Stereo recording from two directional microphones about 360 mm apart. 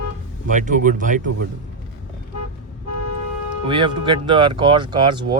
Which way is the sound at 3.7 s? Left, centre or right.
Centre.